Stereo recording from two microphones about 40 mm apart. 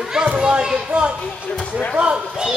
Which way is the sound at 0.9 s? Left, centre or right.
Right.